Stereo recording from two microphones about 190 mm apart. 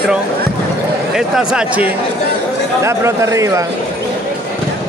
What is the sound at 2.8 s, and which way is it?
Speech, 15° right (ahead or behind).